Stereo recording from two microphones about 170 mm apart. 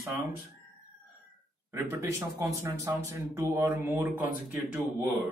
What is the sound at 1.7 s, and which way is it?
Speech, 15° right (ahead or behind).